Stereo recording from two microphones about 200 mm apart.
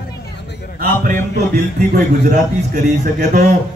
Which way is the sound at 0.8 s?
40° right (ahead or behind).